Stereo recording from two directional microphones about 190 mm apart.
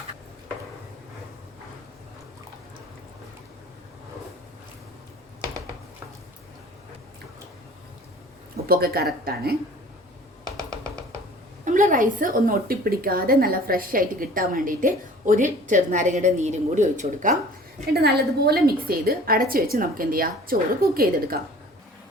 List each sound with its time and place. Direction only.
8.6 s a woman's voice: 55° right (ahead or behind)
11.6 s a woman's voice: 45° right (ahead or behind)
17.9 s a woman's voice: 55° right (ahead or behind)